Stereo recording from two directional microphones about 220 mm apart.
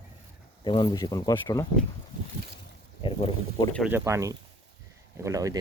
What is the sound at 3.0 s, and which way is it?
Speech, 25° left (ahead or behind).